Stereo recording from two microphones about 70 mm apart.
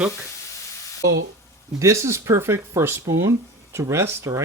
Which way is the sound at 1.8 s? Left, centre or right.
Right.